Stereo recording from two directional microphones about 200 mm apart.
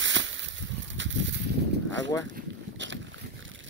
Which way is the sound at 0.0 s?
65° right (ahead or behind).